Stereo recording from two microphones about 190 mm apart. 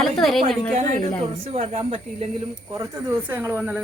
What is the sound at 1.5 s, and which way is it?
Speech, 30° right (ahead or behind).